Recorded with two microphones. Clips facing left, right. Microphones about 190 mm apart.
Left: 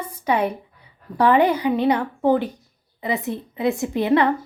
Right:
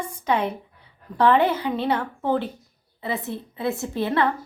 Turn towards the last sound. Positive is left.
turn(degrees=15)  # may be behind; listen again after turning